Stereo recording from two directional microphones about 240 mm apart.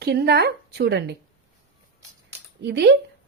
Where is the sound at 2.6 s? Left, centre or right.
Right.